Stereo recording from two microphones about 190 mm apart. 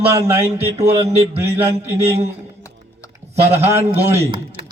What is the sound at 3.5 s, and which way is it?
Speech, 10° right (ahead or behind).